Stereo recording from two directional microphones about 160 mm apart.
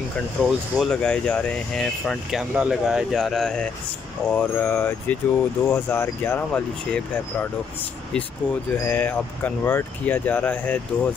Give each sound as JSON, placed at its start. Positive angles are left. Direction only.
{"t": 0.4, "sound": "speech", "side_deg": 5}
{"t": 8.8, "sound": "speech", "side_deg": 10}